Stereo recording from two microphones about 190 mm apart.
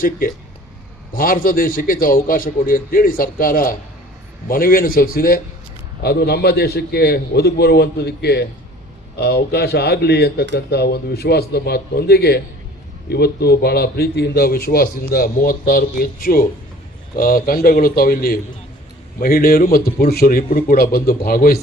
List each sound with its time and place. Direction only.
1.1 s a man's voice: 50° left (ahead or behind)